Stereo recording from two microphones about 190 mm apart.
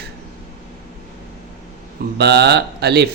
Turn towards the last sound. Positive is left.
turn(degrees=-60)  # may be behind; listen again after turning